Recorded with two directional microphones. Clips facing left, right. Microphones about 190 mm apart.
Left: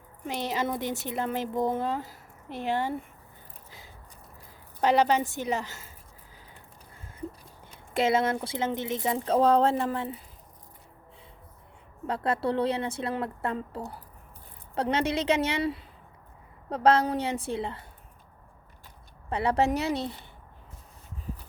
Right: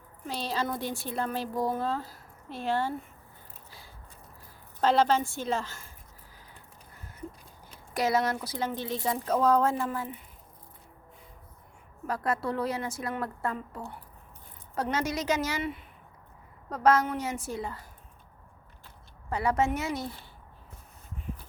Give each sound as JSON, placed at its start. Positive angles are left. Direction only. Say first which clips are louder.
{"t": 0.3, "sound": "speech", "louder": "left 2 dB", "side_deg": 20}
{"t": 3.7, "sound": "a sound", "louder": "left 2 dB", "side_deg": 20}
{"t": 4.8, "sound": "a woman's voice", "louder": "left 1 dB", "side_deg": 15}
{"t": 7.9, "sound": "speech", "louder": "left 2 dB", "side_deg": 25}
{"t": 12.0, "sound": "a woman's voice", "louder": "left 3 dB", "side_deg": 30}
{"t": 19.3, "sound": "a woman's voice", "louder": "left 2 dB", "side_deg": 30}